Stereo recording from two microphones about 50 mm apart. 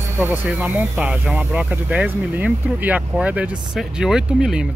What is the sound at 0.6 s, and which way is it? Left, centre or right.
Speech, right.